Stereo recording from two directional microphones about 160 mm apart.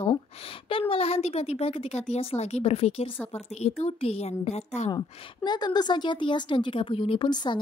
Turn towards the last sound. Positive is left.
turn(degrees=30)  # may be behind; listen again after turning